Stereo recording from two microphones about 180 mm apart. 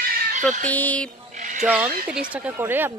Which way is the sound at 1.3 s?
45° right (ahead or behind).